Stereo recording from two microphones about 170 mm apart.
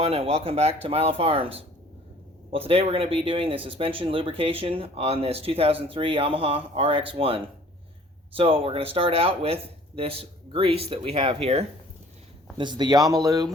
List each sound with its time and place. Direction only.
0.0 s speech: 35° right (ahead or behind)